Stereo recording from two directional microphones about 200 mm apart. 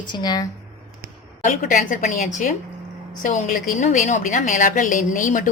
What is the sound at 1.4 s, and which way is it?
A woman's voice, 40° left (ahead or behind).